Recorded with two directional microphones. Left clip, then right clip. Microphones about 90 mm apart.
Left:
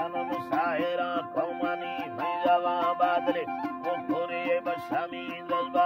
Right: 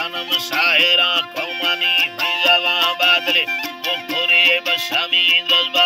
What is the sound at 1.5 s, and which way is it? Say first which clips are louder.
Music: right 14 dB; 15° left (ahead or behind).